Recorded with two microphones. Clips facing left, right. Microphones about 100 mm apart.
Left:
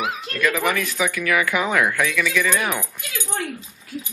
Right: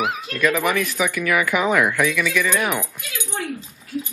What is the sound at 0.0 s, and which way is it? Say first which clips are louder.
Speech: right 2 dB; 5° right (ahead or behind).